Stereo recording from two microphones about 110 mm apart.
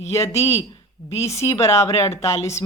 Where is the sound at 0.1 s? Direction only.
25° left (ahead or behind).